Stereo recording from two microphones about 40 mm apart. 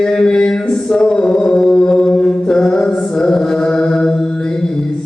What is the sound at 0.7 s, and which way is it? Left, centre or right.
Mantra, centre.